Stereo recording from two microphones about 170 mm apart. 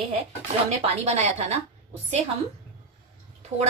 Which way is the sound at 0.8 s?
40° right (ahead or behind).